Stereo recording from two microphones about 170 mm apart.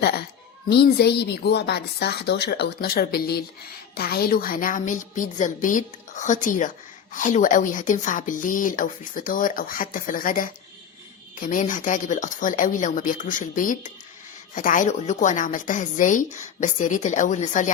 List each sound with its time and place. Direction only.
0.0 s a woman's voice: 65° left (ahead or behind); by 17.7 s 45° left (ahead or behind)